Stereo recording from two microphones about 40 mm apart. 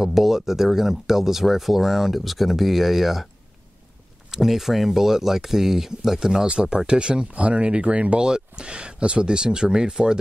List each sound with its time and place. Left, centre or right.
0.0 s speech: centre
4.3 s speech: centre
6.4 s speech: right